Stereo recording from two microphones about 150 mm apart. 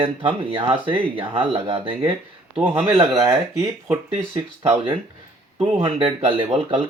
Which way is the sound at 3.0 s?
20° right (ahead or behind).